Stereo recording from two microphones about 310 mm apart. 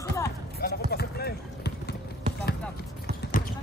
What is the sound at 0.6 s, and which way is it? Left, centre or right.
Run, left.